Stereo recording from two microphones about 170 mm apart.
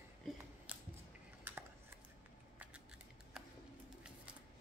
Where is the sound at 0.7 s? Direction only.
5° right (ahead or behind).